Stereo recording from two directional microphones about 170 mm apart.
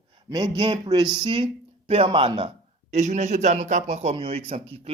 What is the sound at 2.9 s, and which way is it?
A man's voice, 45° right (ahead or behind).